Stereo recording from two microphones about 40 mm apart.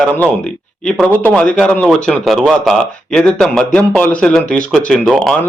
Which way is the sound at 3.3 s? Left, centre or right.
Centre.